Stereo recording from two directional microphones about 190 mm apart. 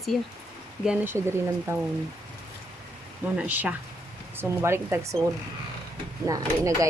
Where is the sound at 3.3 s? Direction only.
10° right (ahead or behind).